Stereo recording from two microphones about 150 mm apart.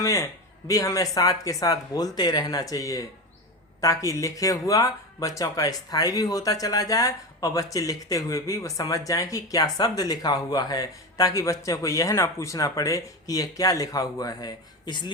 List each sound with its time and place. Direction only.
0.0 s speech: 20° left (ahead or behind)